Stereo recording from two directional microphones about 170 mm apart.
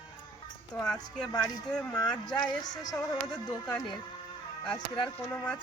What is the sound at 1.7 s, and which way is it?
Speech, 5° left (ahead or behind).